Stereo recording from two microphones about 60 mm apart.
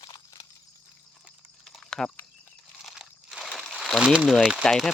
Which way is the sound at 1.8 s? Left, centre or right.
Centre.